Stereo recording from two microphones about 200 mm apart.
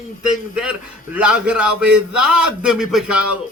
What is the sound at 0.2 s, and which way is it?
Speech, 5° right (ahead or behind).